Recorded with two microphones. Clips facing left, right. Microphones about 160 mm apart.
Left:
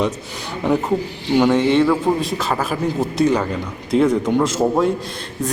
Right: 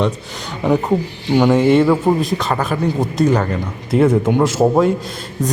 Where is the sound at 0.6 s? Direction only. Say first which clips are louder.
Right 2 dB; centre (ahead or behind).